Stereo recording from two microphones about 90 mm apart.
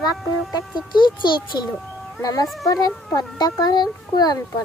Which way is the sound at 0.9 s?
60° left (ahead or behind).